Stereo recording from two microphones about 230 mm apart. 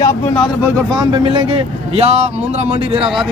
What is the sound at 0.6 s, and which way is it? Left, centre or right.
Speech, centre.